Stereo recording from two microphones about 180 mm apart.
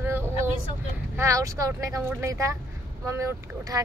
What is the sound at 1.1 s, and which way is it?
Speech, 15° right (ahead or behind).